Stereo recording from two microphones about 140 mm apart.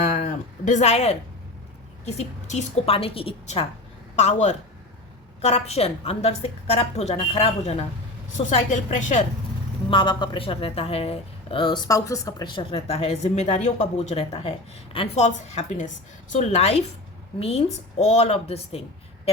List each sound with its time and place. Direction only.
0.0 s a sound: 60° left (ahead or behind)
2.0 s a woman's voice: 50° left (ahead or behind)
8.3 s a woman's voice: 60° left (ahead or behind)
9.9 s a woman's voice: 35° left (ahead or behind)
18.0 s a woman's voice: 50° left (ahead or behind)